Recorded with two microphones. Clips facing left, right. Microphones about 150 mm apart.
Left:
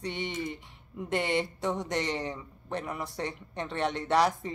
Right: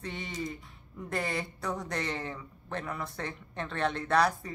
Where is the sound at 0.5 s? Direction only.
20° left (ahead or behind).